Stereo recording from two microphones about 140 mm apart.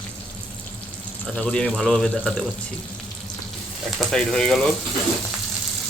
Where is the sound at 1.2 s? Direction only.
5° left (ahead or behind).